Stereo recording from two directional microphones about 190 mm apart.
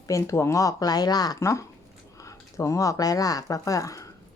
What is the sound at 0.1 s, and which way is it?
Speech, 15° left (ahead or behind).